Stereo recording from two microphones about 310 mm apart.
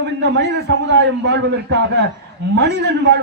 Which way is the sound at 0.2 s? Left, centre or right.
Right.